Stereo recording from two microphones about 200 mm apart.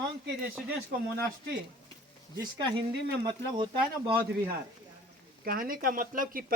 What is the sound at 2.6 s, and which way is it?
Speech, 25° right (ahead or behind).